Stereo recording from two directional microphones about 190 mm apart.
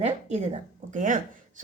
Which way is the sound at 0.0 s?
35° right (ahead or behind).